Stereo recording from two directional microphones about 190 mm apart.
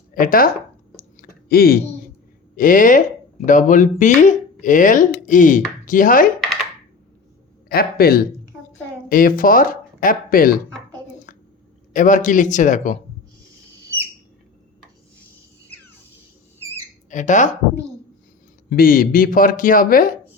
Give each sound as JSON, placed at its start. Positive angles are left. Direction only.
{"t": 0.1, "sound": "speech", "side_deg": 50}
{"t": 0.9, "sound": "clicking", "side_deg": 50}
{"t": 2.6, "sound": "speech", "side_deg": 45}
{"t": 7.7, "sound": "speech", "side_deg": 55}
{"t": 11.3, "sound": "a sound", "side_deg": 45}
{"t": 11.9, "sound": "speech", "side_deg": 40}
{"t": 17.1, "sound": "speech", "side_deg": 40}
{"t": 18.7, "sound": "speech", "side_deg": 50}